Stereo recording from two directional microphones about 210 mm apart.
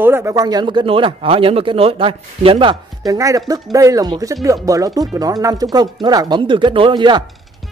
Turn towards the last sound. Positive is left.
turn(degrees=-20)  # may be behind; listen again after turning